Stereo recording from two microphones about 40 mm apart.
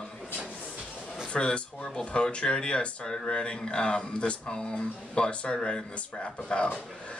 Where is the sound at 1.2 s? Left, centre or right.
Left.